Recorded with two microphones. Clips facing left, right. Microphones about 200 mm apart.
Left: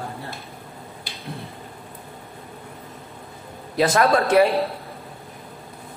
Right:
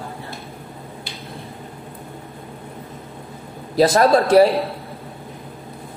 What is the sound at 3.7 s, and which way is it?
Speech, 35° right (ahead or behind).